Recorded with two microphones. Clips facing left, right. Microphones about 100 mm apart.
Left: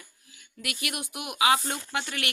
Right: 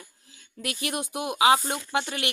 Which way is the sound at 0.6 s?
30° right (ahead or behind).